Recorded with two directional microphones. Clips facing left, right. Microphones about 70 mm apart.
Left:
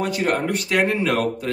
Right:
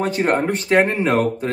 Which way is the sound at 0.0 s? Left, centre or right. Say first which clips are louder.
Right 3 dB; right.